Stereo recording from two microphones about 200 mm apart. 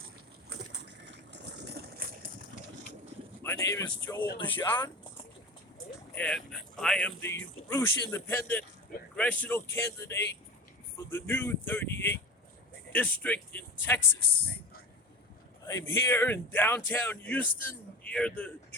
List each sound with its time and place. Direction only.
0.5 s a sound: 60° right (ahead or behind)
3.4 s speech: 15° left (ahead or behind)
6.1 s speech: 5° left (ahead or behind)
15.6 s speech: 15° left (ahead or behind)